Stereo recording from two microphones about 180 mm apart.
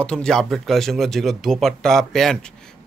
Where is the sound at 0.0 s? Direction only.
5° left (ahead or behind).